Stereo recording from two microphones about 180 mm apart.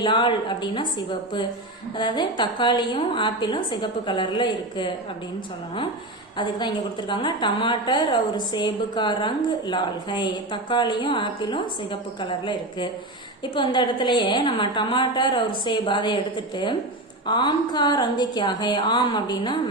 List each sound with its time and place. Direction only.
0.0 s a woman's voice: 25° left (ahead or behind)
2.0 s a woman's voice: 25° left (ahead or behind)
6.3 s a woman's voice: 25° left (ahead or behind)
17.2 s a woman's voice: 25° left (ahead or behind)